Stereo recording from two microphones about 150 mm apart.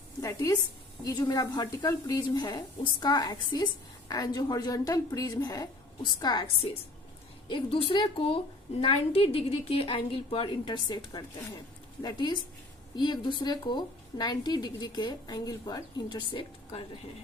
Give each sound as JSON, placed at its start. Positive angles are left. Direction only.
{"t": 0.2, "sound": "a woman's voice", "side_deg": 20}